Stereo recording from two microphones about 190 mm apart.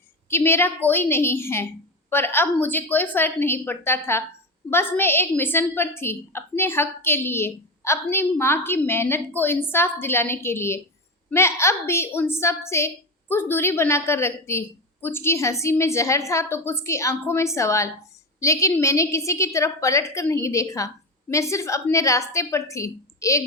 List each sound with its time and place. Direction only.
0.3 s a woman's voice: 15° left (ahead or behind)